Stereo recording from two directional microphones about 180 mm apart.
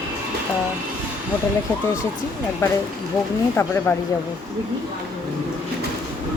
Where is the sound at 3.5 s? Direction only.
10° left (ahead or behind).